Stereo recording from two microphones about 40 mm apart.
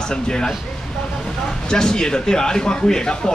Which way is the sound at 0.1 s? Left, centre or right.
Centre.